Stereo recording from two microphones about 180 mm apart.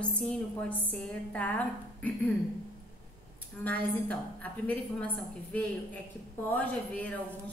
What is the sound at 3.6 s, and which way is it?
A woman's voice, 10° left (ahead or behind).